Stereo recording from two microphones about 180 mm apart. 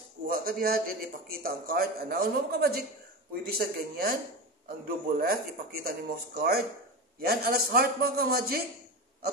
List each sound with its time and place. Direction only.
0.3 s a man's voice: 55° right (ahead or behind)